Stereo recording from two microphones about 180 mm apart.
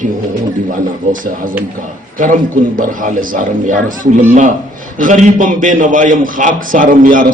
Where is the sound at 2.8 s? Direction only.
50° right (ahead or behind).